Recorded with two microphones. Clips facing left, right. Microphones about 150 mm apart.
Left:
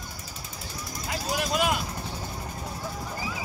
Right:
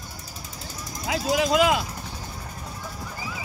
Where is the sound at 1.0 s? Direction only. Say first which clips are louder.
Right 7 dB; 90° right.